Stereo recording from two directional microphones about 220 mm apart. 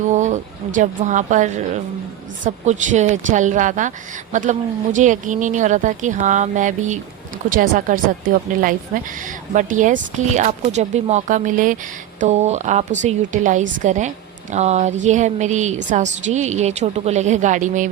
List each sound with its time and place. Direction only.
0.0 s speech: 35° right (ahead or behind)